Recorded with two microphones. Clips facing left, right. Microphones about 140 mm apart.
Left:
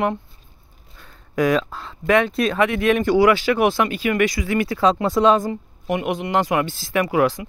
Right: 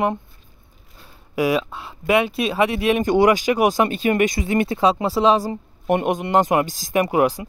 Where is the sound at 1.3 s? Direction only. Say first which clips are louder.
Left 1 dB; 10° right (ahead or behind).